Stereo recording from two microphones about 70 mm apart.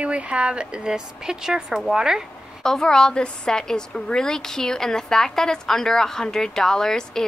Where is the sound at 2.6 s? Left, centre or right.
Centre.